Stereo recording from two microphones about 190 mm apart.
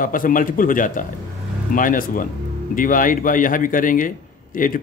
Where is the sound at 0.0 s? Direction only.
45° left (ahead or behind).